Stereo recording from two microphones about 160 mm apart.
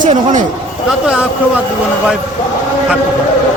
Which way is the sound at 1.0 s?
5° right (ahead or behind).